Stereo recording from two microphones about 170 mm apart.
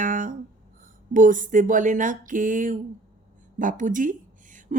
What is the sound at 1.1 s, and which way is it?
A woman's voice, 50° right (ahead or behind).